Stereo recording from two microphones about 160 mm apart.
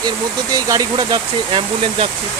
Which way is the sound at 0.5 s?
25° right (ahead or behind).